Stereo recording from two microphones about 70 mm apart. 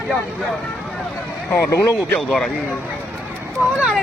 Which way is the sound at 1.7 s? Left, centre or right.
Left.